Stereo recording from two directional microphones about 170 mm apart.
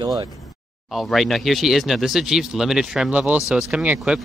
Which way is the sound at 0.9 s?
Centre (ahead or behind).